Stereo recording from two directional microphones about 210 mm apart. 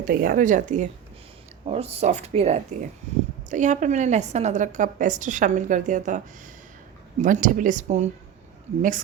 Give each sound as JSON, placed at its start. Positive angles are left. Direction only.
{"t": 0.0, "sound": "a woman's voice", "side_deg": -45}